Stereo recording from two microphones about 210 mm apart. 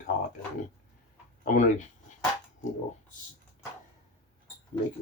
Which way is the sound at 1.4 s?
40° left (ahead or behind).